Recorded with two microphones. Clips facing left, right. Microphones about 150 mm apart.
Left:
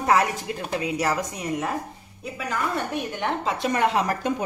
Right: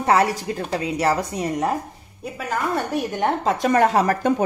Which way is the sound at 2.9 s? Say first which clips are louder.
Right 5 dB; 40° right (ahead or behind).